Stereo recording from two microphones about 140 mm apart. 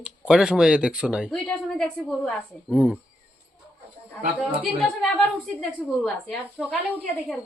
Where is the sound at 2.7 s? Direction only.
10° right (ahead or behind).